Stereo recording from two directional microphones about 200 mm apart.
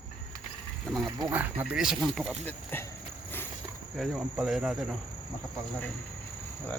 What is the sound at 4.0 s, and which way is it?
Speech, centre (ahead or behind).